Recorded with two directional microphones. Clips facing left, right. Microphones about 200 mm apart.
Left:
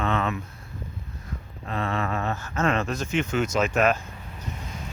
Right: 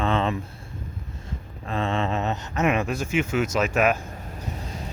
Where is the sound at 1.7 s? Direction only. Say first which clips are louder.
Right 2 dB; 25° right (ahead or behind); by 3.9 s 10° right (ahead or behind).